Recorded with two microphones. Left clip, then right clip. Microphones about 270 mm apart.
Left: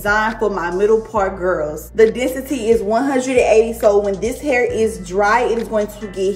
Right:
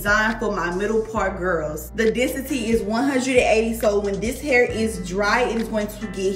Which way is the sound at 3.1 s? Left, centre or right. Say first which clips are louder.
Left 1 dB; left.